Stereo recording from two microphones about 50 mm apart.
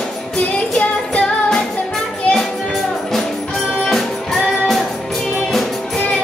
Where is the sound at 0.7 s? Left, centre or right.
Left.